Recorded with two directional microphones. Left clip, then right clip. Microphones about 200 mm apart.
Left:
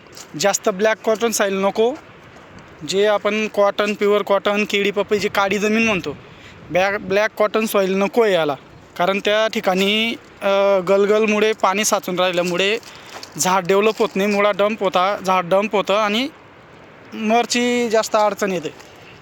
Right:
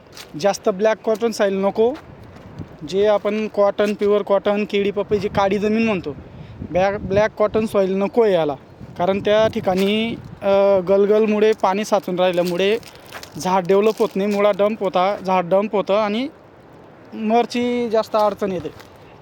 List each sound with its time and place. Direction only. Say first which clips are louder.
0.3 s speech: left 1 dB; centre (ahead or behind)